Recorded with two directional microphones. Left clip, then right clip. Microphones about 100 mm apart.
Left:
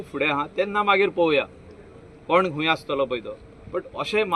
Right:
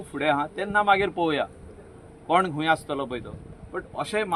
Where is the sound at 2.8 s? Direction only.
30° right (ahead or behind).